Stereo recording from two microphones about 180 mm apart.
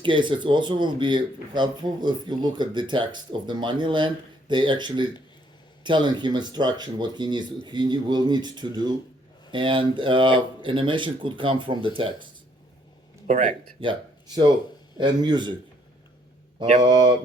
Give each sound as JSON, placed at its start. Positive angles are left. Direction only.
{"t": 0.0, "sound": "speech", "side_deg": -25}
{"t": 13.2, "sound": "speech", "side_deg": -45}
{"t": 13.8, "sound": "speech", "side_deg": -25}
{"t": 16.8, "sound": "speech", "side_deg": -20}